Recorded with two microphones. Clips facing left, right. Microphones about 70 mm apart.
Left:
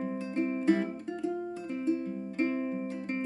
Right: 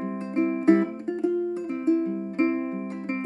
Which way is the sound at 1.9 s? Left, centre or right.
Right.